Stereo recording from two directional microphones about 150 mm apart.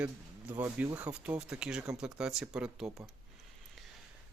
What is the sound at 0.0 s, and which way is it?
Speech, 10° right (ahead or behind).